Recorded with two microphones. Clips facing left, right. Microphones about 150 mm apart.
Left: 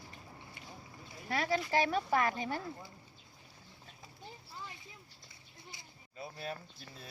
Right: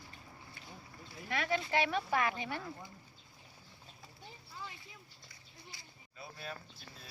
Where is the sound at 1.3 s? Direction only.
35° left (ahead or behind).